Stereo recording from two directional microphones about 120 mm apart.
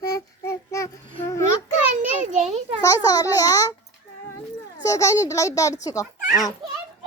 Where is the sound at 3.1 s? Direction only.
30° left (ahead or behind).